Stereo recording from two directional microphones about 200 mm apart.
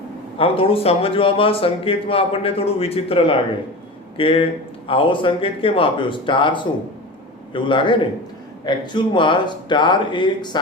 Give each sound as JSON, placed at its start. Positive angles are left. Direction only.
{"t": 0.3, "sound": "a man's voice", "side_deg": 30}